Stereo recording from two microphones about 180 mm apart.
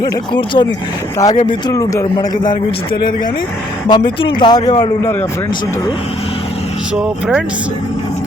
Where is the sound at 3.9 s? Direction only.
25° left (ahead or behind).